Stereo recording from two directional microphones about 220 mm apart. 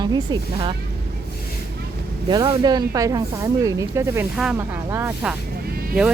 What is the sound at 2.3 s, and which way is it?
Speech, 20° right (ahead or behind).